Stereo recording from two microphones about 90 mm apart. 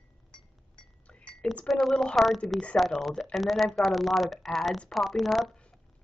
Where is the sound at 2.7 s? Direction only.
Centre (ahead or behind).